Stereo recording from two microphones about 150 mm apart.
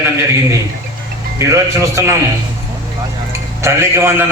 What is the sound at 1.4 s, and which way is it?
Speech, 20° right (ahead or behind).